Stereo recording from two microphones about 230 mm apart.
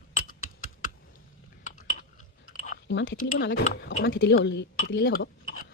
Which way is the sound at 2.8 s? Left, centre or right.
Left.